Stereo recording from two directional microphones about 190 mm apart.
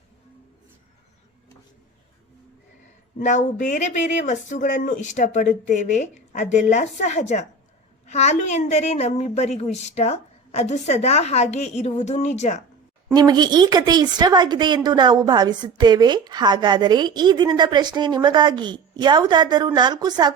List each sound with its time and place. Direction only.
3.2 s a woman's voice: 40° left (ahead or behind)
13.1 s a woman's voice: 20° right (ahead or behind)